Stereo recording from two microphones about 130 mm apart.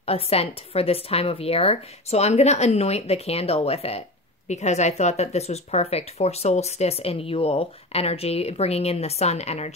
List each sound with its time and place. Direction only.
0.0 s speech: 50° left (ahead or behind)